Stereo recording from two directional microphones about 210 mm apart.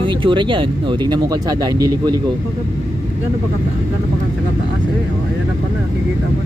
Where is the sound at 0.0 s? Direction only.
25° right (ahead or behind).